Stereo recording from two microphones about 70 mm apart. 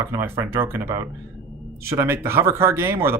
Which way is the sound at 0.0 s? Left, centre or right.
Right.